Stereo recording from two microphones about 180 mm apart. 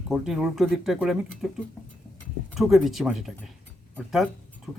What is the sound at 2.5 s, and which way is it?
Speech, centre (ahead or behind).